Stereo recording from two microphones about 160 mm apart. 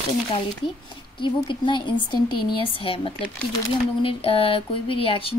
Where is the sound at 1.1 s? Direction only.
30° left (ahead or behind).